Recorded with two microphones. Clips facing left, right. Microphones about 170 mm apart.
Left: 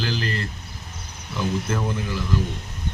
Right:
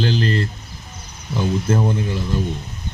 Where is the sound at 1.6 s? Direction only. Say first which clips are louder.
Right 7 dB; 35° right (ahead or behind).